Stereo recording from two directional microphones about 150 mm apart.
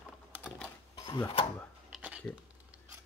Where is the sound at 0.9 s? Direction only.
25° left (ahead or behind).